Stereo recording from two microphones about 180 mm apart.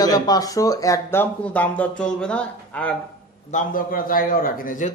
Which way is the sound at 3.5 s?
50° left (ahead or behind).